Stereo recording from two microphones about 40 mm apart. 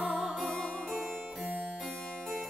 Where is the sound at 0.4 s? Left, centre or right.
Left.